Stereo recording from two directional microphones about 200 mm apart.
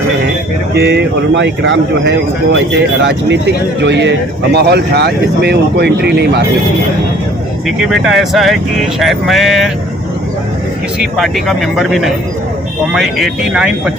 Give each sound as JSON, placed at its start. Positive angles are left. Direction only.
{"t": 0.7, "sound": "speech", "side_deg": -55}
{"t": 7.8, "sound": "speech", "side_deg": 0}
{"t": 11.0, "sound": "speech", "side_deg": 0}